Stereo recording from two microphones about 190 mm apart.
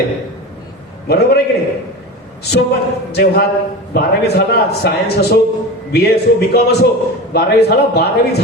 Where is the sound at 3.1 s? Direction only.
55° left (ahead or behind).